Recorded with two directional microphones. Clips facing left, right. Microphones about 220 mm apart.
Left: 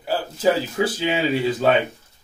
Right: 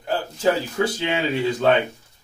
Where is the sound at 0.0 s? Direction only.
5° left (ahead or behind).